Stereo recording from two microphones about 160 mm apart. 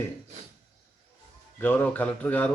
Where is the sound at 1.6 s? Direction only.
10° left (ahead or behind).